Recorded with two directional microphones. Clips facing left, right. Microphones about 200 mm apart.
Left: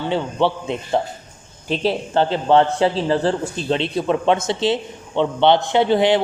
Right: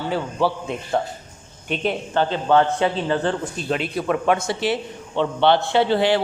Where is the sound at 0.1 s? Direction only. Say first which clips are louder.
Left 2 dB; 25° left (ahead or behind).